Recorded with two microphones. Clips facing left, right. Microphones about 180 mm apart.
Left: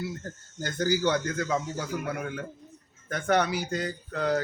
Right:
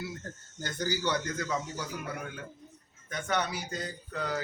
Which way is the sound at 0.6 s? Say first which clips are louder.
Left 6 dB; 50° left (ahead or behind).